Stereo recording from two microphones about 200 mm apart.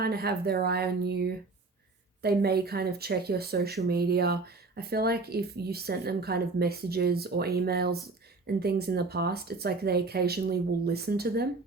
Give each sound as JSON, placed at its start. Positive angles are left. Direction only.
{"t": 0.0, "sound": "speech", "side_deg": -50}